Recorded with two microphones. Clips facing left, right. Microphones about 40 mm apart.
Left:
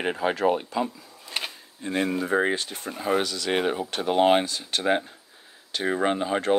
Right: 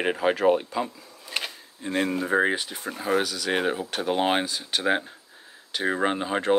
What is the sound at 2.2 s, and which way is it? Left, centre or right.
Speech, centre.